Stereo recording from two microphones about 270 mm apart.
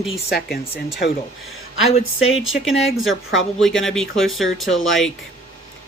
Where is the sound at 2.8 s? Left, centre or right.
Centre.